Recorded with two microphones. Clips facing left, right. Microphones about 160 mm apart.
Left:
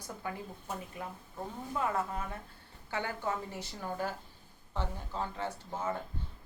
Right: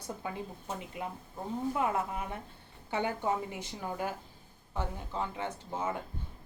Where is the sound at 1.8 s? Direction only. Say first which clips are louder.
Left 2 dB; 20° right (ahead or behind).